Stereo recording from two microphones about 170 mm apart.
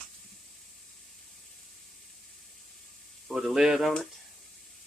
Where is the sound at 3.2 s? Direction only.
5° right (ahead or behind).